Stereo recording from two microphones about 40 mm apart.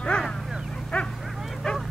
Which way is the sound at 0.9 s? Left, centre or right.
Left.